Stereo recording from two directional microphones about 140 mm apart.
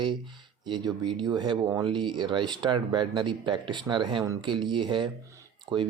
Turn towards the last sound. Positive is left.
turn(degrees=-35)  # may be behind; listen again after turning